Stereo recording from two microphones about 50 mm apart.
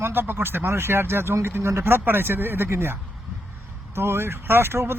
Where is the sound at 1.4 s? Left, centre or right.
Right.